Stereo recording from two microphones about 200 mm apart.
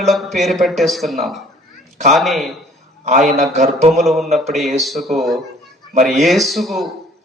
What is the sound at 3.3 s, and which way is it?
Speech, 40° right (ahead or behind).